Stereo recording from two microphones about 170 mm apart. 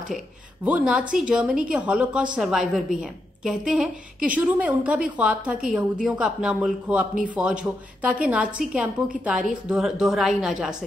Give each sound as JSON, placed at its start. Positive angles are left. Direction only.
{"t": 0.7, "sound": "a woman's voice", "side_deg": -5}